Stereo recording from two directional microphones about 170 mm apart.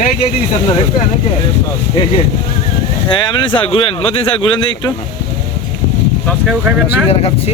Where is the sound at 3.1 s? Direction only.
25° left (ahead or behind).